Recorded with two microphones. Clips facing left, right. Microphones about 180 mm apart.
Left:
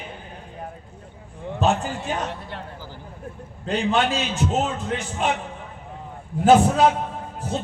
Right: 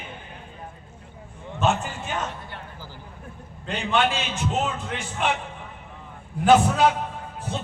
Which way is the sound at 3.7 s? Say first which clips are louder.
Left 2 dB; 35° left (ahead or behind).